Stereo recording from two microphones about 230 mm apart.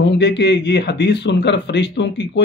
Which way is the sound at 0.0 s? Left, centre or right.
Left.